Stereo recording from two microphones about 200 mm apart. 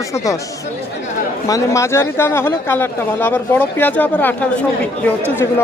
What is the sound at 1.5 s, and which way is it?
Speech, 15° left (ahead or behind).